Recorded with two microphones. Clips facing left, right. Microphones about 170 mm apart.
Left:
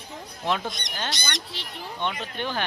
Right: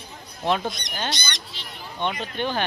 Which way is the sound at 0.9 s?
15° right (ahead or behind).